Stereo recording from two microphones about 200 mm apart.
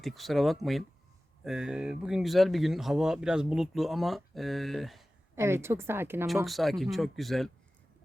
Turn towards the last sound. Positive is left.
turn(degrees=0)  # may be behind; listen again after turning